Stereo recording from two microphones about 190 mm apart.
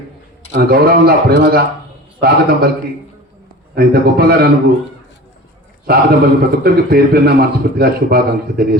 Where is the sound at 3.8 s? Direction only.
55° right (ahead or behind).